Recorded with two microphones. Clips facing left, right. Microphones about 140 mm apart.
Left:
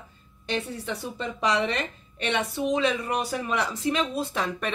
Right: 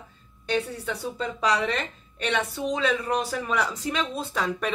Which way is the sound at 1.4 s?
25° left (ahead or behind).